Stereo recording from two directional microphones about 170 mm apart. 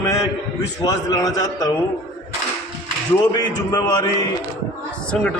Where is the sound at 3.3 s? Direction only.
25° left (ahead or behind).